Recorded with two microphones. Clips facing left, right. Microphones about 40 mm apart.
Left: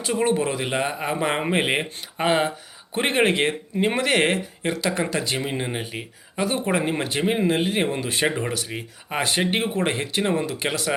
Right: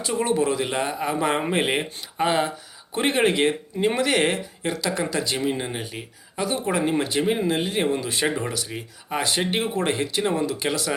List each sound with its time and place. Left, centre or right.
0.0 s speech: left